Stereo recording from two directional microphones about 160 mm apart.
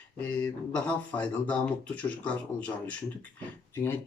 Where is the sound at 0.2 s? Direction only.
10° left (ahead or behind).